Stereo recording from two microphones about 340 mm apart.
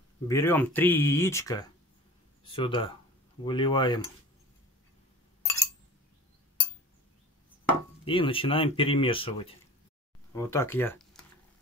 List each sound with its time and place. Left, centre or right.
0.3 s speech: centre
5.4 s a sound: centre
8.0 s speech: centre